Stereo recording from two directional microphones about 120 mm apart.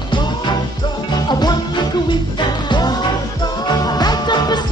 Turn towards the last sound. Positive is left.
turn(degrees=35)  # may be behind; listen again after turning